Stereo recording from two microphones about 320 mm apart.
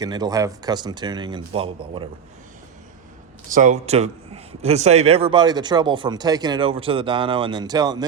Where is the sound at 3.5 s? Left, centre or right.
Right.